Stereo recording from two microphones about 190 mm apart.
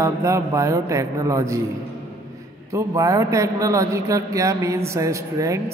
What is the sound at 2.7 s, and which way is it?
A man's voice, 15° right (ahead or behind).